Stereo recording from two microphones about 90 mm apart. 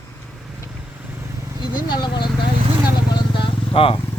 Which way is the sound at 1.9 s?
55° left (ahead or behind).